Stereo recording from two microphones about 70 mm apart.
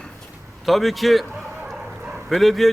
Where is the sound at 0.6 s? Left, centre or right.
Centre.